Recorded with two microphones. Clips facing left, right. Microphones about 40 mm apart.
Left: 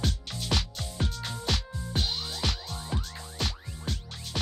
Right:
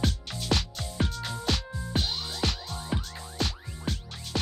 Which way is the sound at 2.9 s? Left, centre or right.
Centre.